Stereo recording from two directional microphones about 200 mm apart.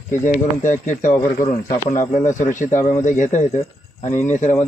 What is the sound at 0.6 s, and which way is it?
Speech, 40° left (ahead or behind).